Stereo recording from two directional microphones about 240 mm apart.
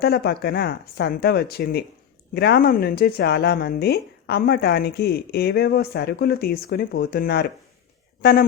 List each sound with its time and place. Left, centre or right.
0.0 s speech: left